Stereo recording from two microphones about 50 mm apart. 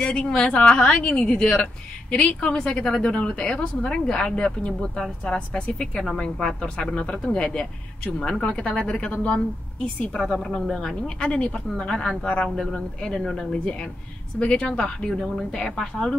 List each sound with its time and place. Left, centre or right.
0.0 s a woman's voice: centre
1.3 s a woman's voice: centre